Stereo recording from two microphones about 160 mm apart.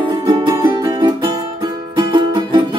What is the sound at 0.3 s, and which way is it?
Music, 30° right (ahead or behind).